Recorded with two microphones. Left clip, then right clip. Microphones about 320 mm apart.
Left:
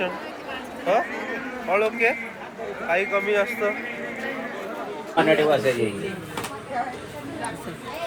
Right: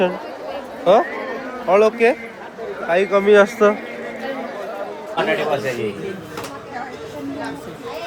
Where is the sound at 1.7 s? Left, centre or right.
Right.